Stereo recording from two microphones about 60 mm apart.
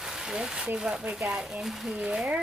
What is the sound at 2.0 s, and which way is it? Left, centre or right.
Speech, centre.